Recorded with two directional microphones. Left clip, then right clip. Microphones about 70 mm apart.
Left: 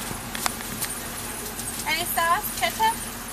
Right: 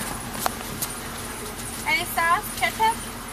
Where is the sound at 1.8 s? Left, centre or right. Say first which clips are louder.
Right 2 dB; left.